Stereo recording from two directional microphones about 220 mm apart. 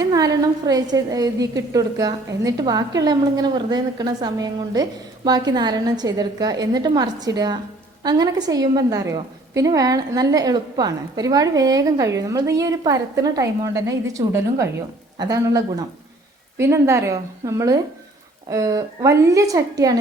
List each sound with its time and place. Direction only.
0.0 s a woman's voice: 15° right (ahead or behind)